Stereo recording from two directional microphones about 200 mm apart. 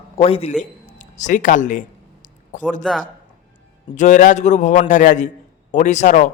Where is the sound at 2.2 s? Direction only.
40° left (ahead or behind).